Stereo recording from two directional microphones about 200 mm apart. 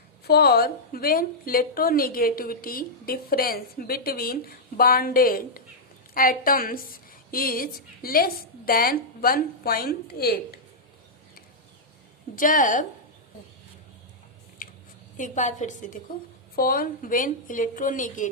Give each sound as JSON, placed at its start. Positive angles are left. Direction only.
{"t": 0.3, "sound": "a woman's voice", "side_deg": 50}
{"t": 12.4, "sound": "a woman's voice", "side_deg": 40}
{"t": 15.2, "sound": "a woman's voice", "side_deg": 35}